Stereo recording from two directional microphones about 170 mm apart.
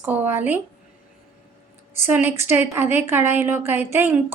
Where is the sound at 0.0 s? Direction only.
10° right (ahead or behind).